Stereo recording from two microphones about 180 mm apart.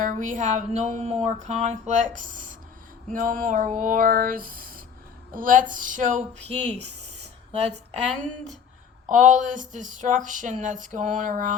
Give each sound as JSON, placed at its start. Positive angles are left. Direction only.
{"t": 0.0, "sound": "speech", "side_deg": -45}
{"t": 9.0, "sound": "speech", "side_deg": -45}